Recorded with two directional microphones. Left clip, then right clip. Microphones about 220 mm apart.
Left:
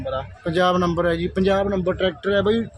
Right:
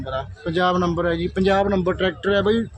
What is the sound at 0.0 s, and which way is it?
Speech, centre (ahead or behind).